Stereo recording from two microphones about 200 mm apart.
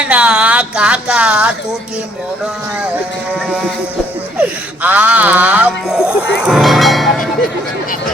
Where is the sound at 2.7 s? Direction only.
5° right (ahead or behind).